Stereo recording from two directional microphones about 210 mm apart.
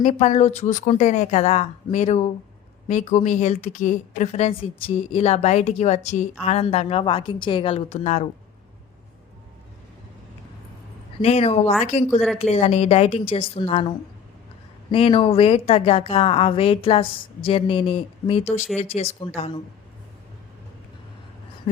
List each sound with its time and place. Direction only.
0.0 s a woman's voice: 30° left (ahead or behind)
11.2 s a woman's voice: 30° left (ahead or behind)
14.9 s a woman's voice: 25° left (ahead or behind)